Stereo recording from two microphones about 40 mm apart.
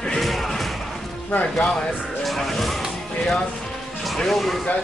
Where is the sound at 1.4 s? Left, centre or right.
Left.